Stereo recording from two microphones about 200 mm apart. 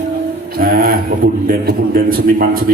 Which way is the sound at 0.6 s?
50° right (ahead or behind).